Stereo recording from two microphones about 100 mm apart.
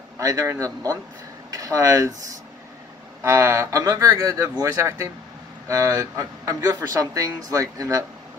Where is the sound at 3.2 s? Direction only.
30° right (ahead or behind).